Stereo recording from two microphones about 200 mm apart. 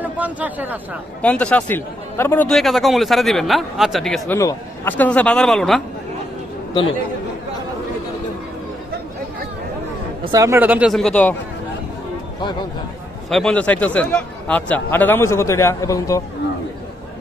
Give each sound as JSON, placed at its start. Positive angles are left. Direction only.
{"t": 0.0, "sound": "speech", "side_deg": -10}
{"t": 1.2, "sound": "a man's voice", "side_deg": 5}
{"t": 4.4, "sound": "a man's voice", "side_deg": 10}
{"t": 10.2, "sound": "speech", "side_deg": -15}
{"t": 13.3, "sound": "a man's voice", "side_deg": 5}